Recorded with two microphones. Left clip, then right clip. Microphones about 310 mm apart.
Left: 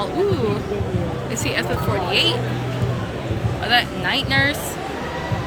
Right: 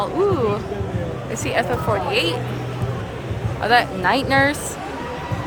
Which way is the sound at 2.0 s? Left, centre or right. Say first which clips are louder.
Left 2 dB; centre.